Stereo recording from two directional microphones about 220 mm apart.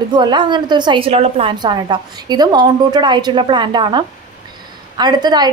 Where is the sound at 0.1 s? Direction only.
20° right (ahead or behind).